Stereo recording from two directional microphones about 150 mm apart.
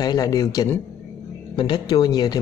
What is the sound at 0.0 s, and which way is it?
Speech, 25° left (ahead or behind).